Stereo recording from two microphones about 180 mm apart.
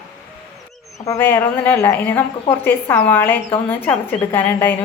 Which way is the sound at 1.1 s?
15° left (ahead or behind).